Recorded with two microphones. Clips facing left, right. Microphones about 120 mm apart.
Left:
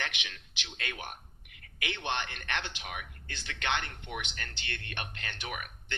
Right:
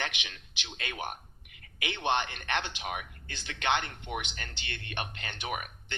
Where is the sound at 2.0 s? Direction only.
15° right (ahead or behind).